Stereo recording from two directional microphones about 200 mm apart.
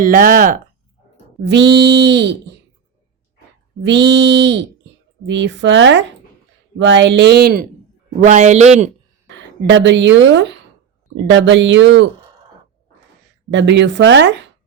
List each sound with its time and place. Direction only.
0.0 s speech: 45° right (ahead or behind)
1.5 s speech: 60° right (ahead or behind)
3.8 s speech: 60° right (ahead or behind)
8.2 s a man's voice: 35° right (ahead or behind)
9.3 s speech: 65° right (ahead or behind)
13.5 s speech: 65° right (ahead or behind)